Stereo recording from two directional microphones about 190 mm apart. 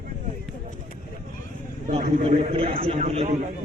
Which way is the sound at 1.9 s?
35° right (ahead or behind).